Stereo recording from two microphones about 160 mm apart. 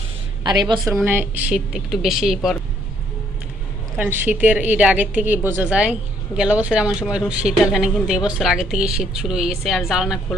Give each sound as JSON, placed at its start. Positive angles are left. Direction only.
{"t": 0.4, "sound": "a woman's voice", "side_deg": -30}
{"t": 1.0, "sound": "a woman's voice", "side_deg": -10}
{"t": 3.9, "sound": "a woman's voice", "side_deg": -10}